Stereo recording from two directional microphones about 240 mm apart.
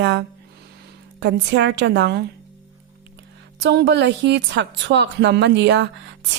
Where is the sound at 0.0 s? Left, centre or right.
Right.